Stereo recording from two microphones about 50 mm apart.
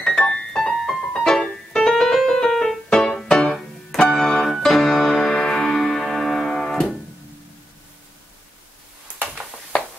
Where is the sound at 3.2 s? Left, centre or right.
Centre.